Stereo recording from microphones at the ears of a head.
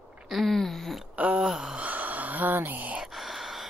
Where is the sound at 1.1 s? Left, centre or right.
Centre.